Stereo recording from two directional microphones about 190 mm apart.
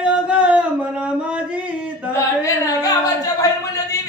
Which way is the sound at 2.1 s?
15° left (ahead or behind).